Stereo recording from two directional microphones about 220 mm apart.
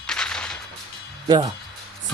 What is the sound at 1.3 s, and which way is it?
Speech, 20° right (ahead or behind).